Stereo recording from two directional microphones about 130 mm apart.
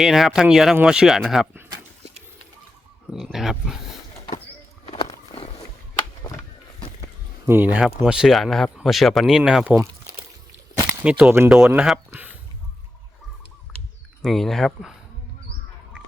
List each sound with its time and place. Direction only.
0.0 s speech: centre (ahead or behind)
3.3 s speech: 5° right (ahead or behind)
4.9 s a sound: 30° left (ahead or behind)
6.2 s a sound: 30° left (ahead or behind)
7.4 s speech: 15° right (ahead or behind)
10.8 s speech: 10° right (ahead or behind)
14.2 s speech: 5° left (ahead or behind)